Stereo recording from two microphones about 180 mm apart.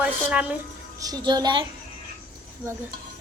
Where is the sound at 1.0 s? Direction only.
20° right (ahead or behind).